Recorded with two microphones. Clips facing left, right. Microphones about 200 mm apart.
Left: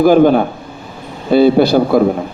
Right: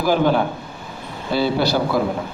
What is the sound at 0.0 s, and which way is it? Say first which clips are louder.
A man's voice: left 9 dB; 50° left (ahead or behind).